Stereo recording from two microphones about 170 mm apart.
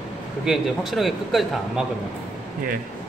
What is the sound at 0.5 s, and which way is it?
A man's voice, centre (ahead or behind).